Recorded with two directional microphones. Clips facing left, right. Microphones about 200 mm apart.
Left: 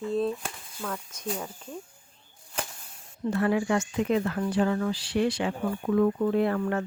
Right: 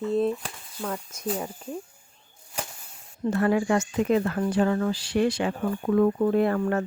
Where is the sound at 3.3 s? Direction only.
45° right (ahead or behind).